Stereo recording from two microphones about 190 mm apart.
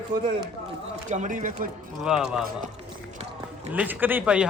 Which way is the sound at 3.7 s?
10° right (ahead or behind).